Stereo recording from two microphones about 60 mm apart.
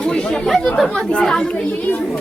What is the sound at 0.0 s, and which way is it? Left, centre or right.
Chatter, centre.